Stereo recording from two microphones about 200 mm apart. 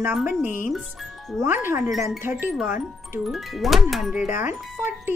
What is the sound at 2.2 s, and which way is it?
Speech, 10° right (ahead or behind).